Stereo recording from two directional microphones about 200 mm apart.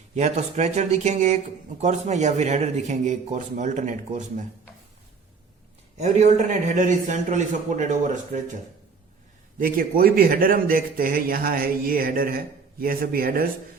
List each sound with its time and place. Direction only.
0.1 s a man's voice: 35° right (ahead or behind)
6.0 s a man's voice: 35° right (ahead or behind)
9.6 s a man's voice: 45° right (ahead or behind)